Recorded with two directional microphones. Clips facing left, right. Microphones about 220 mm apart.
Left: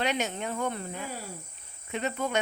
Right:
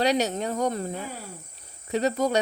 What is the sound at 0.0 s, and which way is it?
Speech, 35° right (ahead or behind).